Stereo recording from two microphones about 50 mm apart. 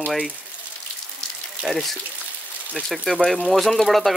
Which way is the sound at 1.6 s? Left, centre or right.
Centre.